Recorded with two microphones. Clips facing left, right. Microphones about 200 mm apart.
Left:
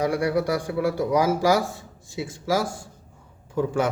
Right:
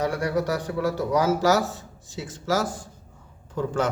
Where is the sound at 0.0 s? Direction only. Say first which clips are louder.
Left 2 dB; 10° left (ahead or behind).